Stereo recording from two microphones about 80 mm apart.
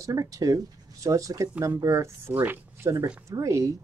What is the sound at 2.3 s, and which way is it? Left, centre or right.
Speech, right.